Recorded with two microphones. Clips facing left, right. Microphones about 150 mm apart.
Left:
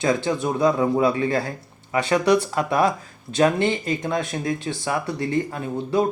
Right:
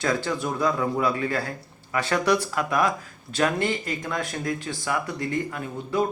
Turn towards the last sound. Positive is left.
turn(degrees=30)  # may be behind; listen again after turning